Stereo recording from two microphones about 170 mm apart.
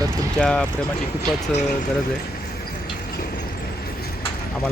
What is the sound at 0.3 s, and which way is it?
Speech, 5° left (ahead or behind).